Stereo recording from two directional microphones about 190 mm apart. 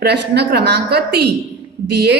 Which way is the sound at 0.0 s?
60° right (ahead or behind).